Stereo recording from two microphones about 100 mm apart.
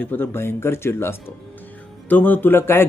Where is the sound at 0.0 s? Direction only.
20° left (ahead or behind).